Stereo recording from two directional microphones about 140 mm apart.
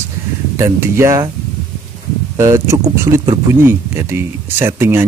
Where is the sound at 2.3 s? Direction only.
20° right (ahead or behind).